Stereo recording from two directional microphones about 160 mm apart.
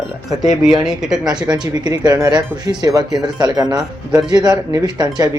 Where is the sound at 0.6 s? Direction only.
Centre (ahead or behind).